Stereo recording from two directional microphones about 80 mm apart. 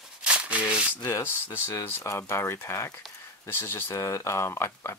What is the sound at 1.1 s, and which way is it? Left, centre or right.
Speech, left.